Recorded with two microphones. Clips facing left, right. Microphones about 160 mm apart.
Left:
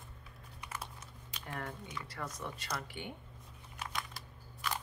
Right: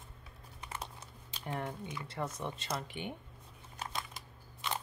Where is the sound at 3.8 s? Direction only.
25° right (ahead or behind).